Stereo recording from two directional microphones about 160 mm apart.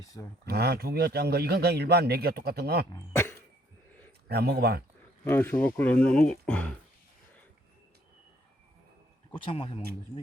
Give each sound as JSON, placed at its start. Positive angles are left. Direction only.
{"t": 0.4, "sound": "a man's voice", "side_deg": -90}
{"t": 2.9, "sound": "speech", "side_deg": 15}
{"t": 4.3, "sound": "a man's voice", "side_deg": -85}
{"t": 5.2, "sound": "speech", "side_deg": 15}
{"t": 9.3, "sound": "speech", "side_deg": 35}